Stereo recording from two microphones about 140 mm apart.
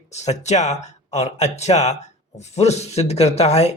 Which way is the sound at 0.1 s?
55° left (ahead or behind).